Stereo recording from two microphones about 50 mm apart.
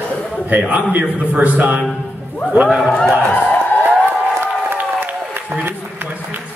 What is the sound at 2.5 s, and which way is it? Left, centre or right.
Speech, centre.